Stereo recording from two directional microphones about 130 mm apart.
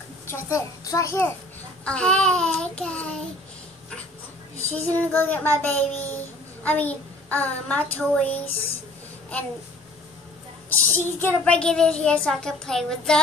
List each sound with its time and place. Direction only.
0.3 s a child's voice: 20° left (ahead or behind)
1.9 s child singing: 10° left (ahead or behind)
4.6 s child singing: 15° left (ahead or behind)
10.7 s child singing: 15° left (ahead or behind)